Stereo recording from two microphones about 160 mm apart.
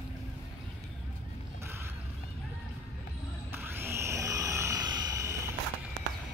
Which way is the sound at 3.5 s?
15° right (ahead or behind).